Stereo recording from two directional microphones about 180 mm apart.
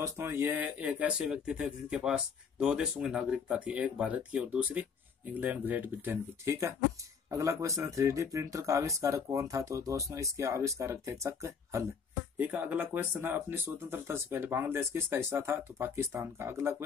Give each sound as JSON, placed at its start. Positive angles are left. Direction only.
{"t": 0.0, "sound": "speech", "side_deg": -15}